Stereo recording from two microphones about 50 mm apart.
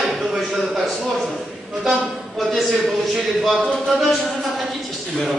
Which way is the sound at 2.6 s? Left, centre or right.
Centre.